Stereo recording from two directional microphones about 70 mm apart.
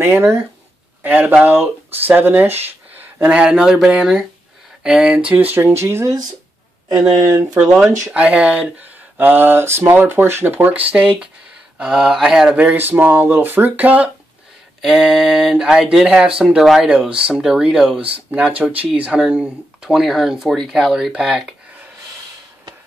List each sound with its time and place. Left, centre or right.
0.0 s speech: right
1.0 s speech: right
3.2 s speech: centre; by 6.1 s right
6.9 s speech: right
8.1 s speech: centre
11.8 s speech: centre
12.5 s speech: right
14.8 s speech: centre
18.3 s speech: right